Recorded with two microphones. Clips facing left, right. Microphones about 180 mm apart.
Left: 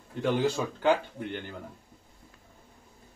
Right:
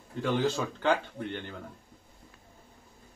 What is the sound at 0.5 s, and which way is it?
Speech, 10° left (ahead or behind).